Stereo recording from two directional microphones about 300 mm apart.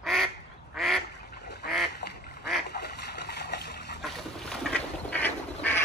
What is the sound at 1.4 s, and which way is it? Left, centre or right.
Duck, left.